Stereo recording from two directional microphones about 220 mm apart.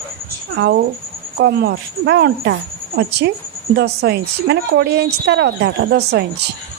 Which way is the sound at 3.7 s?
45° right (ahead or behind).